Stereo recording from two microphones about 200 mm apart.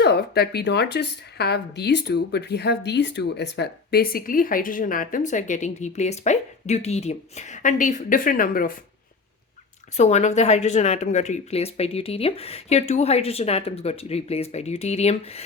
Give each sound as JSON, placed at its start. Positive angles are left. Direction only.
{"t": 0.0, "sound": "a woman's voice", "side_deg": 55}
{"t": 10.0, "sound": "speech", "side_deg": 35}